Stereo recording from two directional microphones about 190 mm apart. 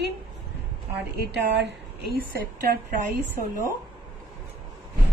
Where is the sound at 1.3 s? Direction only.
65° right (ahead or behind).